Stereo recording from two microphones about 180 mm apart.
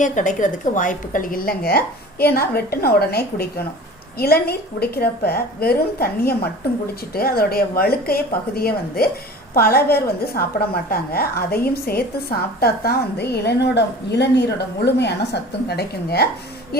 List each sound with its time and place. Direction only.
0.0 s a woman's voice: 45° left (ahead or behind); by 16.3 s 65° left (ahead or behind)